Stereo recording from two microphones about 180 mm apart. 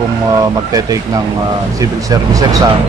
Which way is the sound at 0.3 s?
20° right (ahead or behind).